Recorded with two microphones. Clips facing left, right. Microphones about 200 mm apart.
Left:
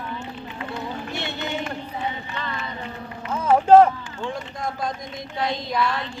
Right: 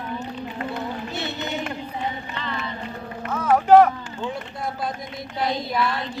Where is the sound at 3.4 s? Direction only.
25° left (ahead or behind).